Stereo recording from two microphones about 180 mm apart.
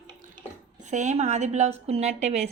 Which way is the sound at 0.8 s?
40° right (ahead or behind).